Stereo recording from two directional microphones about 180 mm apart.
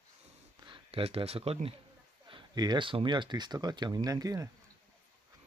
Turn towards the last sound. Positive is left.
turn(degrees=-20)  # may be behind; listen again after turning